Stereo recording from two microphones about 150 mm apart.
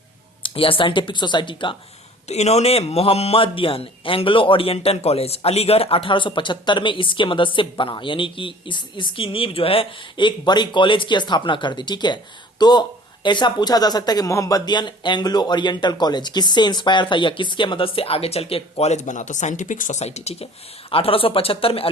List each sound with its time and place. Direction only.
0.4 s speech: 35° left (ahead or behind)
2.2 s speech: 45° left (ahead or behind)